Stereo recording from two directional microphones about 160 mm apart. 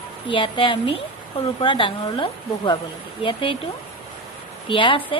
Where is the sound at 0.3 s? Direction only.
30° left (ahead or behind).